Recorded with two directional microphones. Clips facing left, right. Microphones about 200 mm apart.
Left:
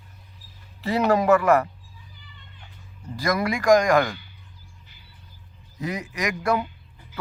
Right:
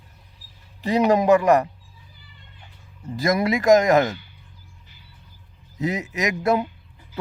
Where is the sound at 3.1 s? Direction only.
20° right (ahead or behind).